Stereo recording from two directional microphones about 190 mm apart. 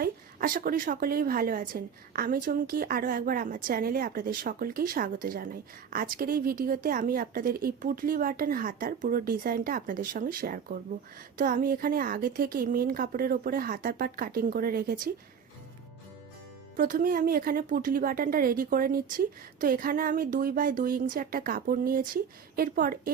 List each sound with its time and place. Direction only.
0.0 s a woman's voice: 50° right (ahead or behind)
16.7 s a woman's voice: 45° right (ahead or behind)